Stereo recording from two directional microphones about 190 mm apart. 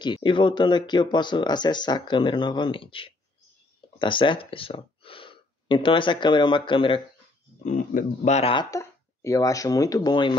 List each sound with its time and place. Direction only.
0.0 s speech: 25° left (ahead or behind)
7.6 s speech: 40° left (ahead or behind)
8.6 s speech: 15° left (ahead or behind)